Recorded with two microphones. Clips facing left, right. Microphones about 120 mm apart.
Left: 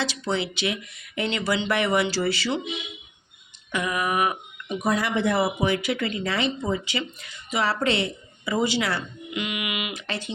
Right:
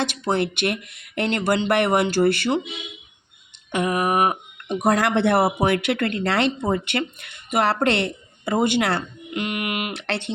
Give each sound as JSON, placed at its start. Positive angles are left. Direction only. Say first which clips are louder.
{"t": 0.0, "sound": "speech", "louder": "right 4 dB", "side_deg": -55}
{"t": 3.8, "sound": "a sound", "louder": "right 4 dB", "side_deg": -40}
{"t": 4.7, "sound": "speech", "louder": "right 5 dB", "side_deg": -75}
{"t": 9.9, "sound": "speech", "louder": "right 5 dB", "side_deg": -70}